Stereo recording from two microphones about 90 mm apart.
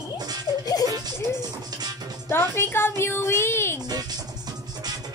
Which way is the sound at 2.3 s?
25° left (ahead or behind).